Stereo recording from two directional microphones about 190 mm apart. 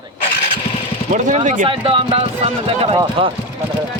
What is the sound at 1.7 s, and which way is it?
Speech, 30° right (ahead or behind).